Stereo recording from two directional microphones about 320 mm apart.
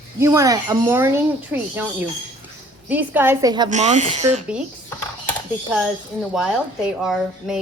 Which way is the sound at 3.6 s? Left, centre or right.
Right.